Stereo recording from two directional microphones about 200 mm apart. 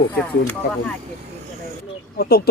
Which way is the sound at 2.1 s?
50° left (ahead or behind).